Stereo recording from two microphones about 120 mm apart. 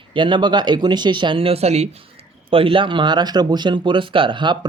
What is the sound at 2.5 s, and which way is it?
Speech, 50° right (ahead or behind).